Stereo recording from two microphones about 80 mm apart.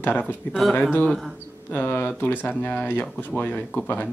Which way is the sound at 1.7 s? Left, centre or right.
Left.